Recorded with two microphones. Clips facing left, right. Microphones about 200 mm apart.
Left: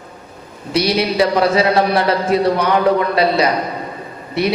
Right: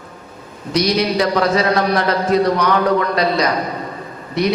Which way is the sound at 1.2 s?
30° left (ahead or behind).